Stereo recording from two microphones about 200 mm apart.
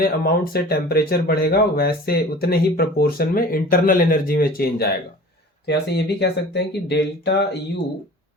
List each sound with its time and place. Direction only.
0.0 s speech: 50° left (ahead or behind)